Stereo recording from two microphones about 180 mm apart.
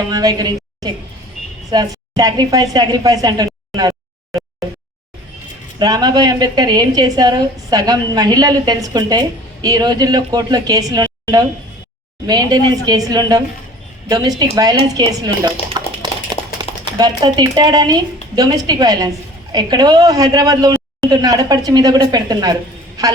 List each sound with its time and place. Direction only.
0.1 s a woman's voice: 20° right (ahead or behind)
5.8 s a woman's voice: 25° right (ahead or behind)
15.8 s a sound: 25° right (ahead or behind)
16.3 s a man's voice: 25° right (ahead or behind)